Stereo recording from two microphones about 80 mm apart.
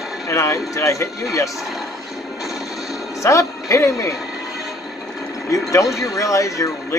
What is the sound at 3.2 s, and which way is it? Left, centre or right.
Speech, left.